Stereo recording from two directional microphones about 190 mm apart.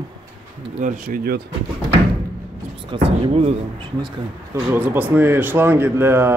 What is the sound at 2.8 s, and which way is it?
Speech, 25° right (ahead or behind).